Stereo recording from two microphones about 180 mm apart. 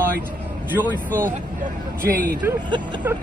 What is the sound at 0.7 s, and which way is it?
Speech, 10° right (ahead or behind).